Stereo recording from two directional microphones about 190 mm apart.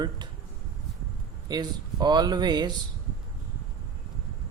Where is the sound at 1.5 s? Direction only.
20° right (ahead or behind).